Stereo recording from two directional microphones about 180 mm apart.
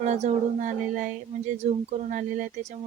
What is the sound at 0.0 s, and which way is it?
Speech, 40° right (ahead or behind).